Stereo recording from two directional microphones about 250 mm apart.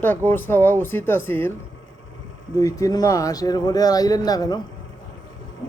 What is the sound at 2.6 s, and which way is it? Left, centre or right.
Speech, centre.